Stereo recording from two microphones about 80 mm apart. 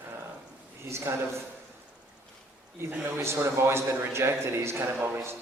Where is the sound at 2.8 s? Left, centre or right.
Right.